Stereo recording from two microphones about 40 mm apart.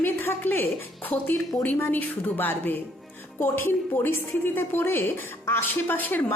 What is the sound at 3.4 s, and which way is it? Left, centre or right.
A woman's voice, left.